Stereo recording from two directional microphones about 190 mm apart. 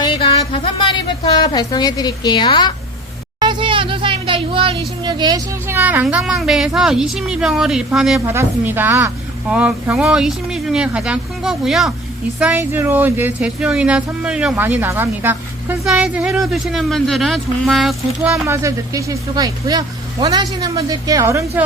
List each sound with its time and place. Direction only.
0.0 s a woman's voice: 25° left (ahead or behind)
3.4 s a sound: 25° right (ahead or behind)
5.0 s speech: 20° right (ahead or behind); by 17.9 s centre (ahead or behind)
18.4 s speech: 15° right (ahead or behind)